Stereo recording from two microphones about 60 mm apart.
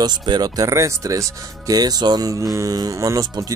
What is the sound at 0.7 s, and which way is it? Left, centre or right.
Speech, right.